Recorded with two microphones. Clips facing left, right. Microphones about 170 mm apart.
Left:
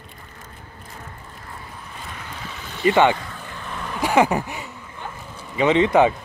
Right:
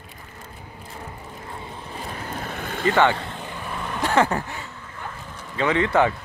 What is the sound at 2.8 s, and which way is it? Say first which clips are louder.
Speech: left 3 dB; 15° left (ahead or behind).